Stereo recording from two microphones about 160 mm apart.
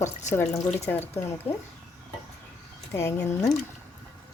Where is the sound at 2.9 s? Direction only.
15° left (ahead or behind).